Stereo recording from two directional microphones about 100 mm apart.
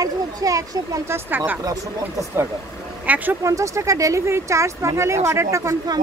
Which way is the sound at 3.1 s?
15° right (ahead or behind).